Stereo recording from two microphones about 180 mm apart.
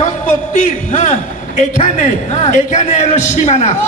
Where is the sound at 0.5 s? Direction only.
45° left (ahead or behind).